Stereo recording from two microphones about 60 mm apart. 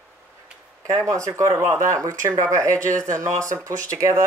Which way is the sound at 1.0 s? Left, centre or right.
Right.